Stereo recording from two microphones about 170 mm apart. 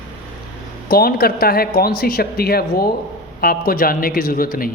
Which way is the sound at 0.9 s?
60° left (ahead or behind).